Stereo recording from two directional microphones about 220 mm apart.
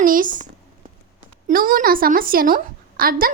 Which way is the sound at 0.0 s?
40° right (ahead or behind).